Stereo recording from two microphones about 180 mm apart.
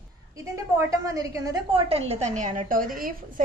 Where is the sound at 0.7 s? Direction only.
20° right (ahead or behind).